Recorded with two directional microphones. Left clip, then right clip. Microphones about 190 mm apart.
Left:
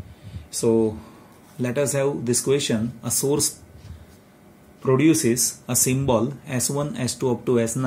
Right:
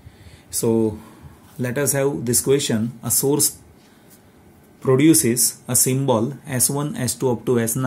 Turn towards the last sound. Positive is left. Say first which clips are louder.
# right 1 dB
turn(degrees=-30)  # may be behind; listen again after turning